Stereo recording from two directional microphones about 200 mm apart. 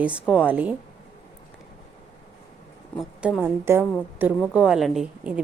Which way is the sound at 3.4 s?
10° right (ahead or behind).